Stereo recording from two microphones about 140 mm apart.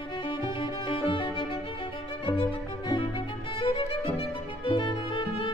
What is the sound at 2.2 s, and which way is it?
Violin, 40° left (ahead or behind).